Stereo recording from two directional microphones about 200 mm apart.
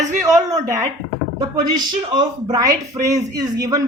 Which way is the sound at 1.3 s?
20° right (ahead or behind).